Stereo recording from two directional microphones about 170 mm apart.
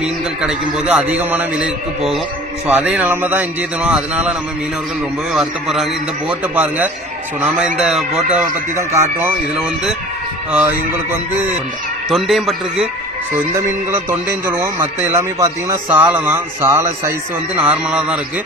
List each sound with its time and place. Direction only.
0.0 s a man's voice: 5° right (ahead or behind)
8.7 s a man's voice: 15° right (ahead or behind)
10.5 s a man's voice: 10° right (ahead or behind)
12.1 s a man's voice: centre (ahead or behind)
13.3 s a man's voice: 15° right (ahead or behind)